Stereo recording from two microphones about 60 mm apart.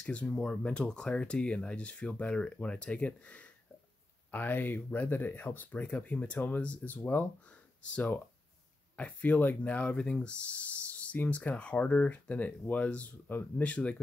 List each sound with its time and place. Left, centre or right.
0.0 s speech: left
4.3 s speech: left
8.9 s speech: left